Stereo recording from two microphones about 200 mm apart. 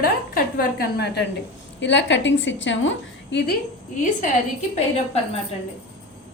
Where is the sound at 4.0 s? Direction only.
40° left (ahead or behind).